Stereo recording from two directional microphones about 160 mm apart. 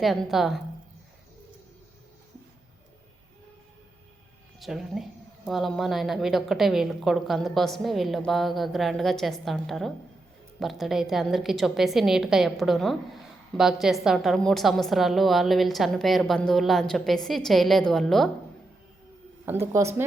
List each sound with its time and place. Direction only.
0.0 s a woman's voice: centre (ahead or behind)
4.6 s a woman's voice: centre (ahead or behind)
19.5 s speech: 15° right (ahead or behind)